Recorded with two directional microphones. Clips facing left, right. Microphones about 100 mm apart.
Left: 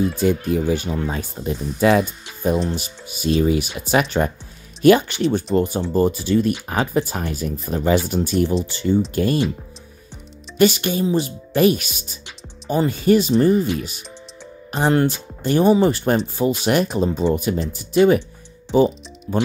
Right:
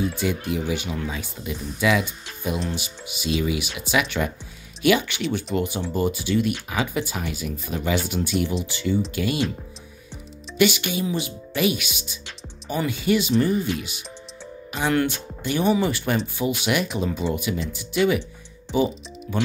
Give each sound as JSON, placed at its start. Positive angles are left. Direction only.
{"t": 0.0, "sound": "speech", "side_deg": 45}
{"t": 10.6, "sound": "speech", "side_deg": 40}
{"t": 19.3, "sound": "speech", "side_deg": 35}